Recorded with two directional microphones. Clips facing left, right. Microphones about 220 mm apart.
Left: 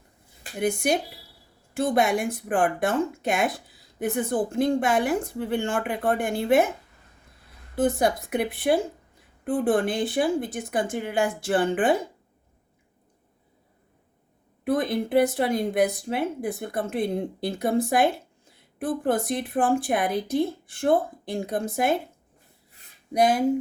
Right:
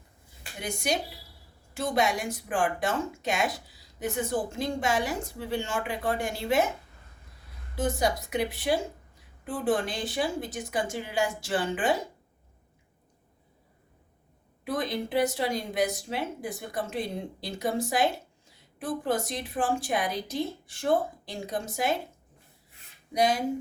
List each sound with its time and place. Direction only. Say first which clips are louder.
0.6 s a woman's voice: left 7 dB; 55° left (ahead or behind)
7.8 s a woman's voice: left 5 dB; 55° left (ahead or behind)
14.6 s a woman's voice: left 6 dB; 55° left (ahead or behind)
23.1 s speech: left 4 dB; 55° left (ahead or behind)